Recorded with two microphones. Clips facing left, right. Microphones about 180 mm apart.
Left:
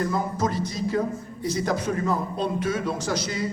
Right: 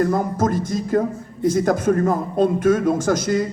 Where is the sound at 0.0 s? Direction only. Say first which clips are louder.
Right 6 dB; 50° right (ahead or behind).